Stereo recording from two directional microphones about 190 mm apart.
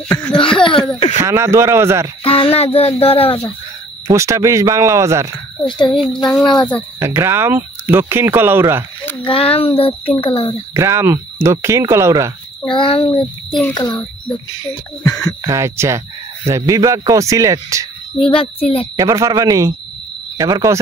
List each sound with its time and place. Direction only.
0.1 s speech: 5° left (ahead or behind)
0.4 s speech: 25° left (ahead or behind)
1.1 s speech: 15° right (ahead or behind)
2.2 s a child's voice: 30° left (ahead or behind)
4.1 s speech: 15° right (ahead or behind)
5.7 s speech: 25° left (ahead or behind)
7.0 s speech: 15° right (ahead or behind)
9.2 s speech: 30° left (ahead or behind)
10.7 s speech: 15° right (ahead or behind)
12.6 s speech: 25° left (ahead or behind)
15.4 s speech: 15° right (ahead or behind)
18.2 s speech: 30° left (ahead or behind)
18.9 s speech: 15° right (ahead or behind)